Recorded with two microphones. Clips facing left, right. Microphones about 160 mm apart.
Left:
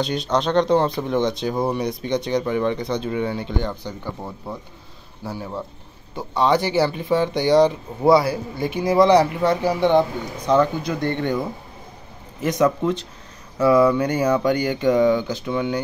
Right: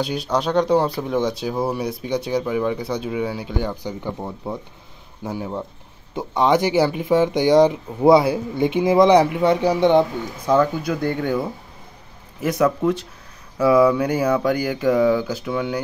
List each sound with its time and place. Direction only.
0.0 s speech: 10° right (ahead or behind)